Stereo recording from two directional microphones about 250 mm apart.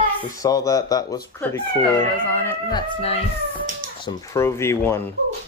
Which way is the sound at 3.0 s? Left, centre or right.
Left.